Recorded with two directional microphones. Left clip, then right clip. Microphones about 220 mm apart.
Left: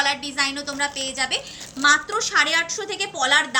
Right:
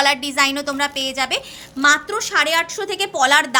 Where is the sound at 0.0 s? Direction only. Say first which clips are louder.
Right 6 dB; 55° right (ahead or behind).